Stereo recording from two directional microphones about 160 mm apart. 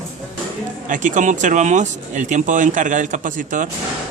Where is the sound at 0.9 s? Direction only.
50° right (ahead or behind).